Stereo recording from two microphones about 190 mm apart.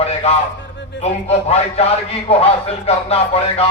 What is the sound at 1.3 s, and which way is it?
A man's voice, 35° left (ahead or behind).